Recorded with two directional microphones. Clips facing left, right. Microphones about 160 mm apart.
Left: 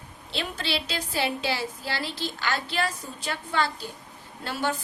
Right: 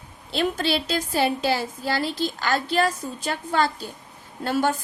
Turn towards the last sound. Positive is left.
turn(degrees=-45)  # may be behind; listen again after turning